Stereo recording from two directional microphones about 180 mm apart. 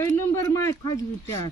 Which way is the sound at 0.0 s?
15° left (ahead or behind).